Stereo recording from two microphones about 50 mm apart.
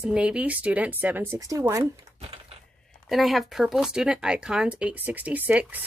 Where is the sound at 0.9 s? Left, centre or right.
Right.